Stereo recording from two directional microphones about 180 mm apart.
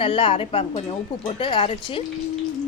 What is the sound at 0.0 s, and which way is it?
A woman's voice, 30° left (ahead or behind).